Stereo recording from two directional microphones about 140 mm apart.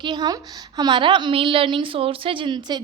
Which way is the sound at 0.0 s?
30° right (ahead or behind).